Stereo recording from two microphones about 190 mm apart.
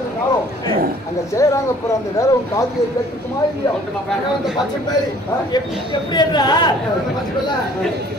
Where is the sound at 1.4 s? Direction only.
15° left (ahead or behind).